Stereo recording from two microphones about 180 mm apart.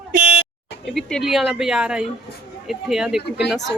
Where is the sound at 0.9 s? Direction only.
Centre (ahead or behind).